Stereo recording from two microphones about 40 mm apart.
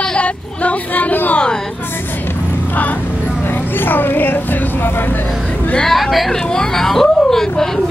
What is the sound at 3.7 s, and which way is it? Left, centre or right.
Speech, left.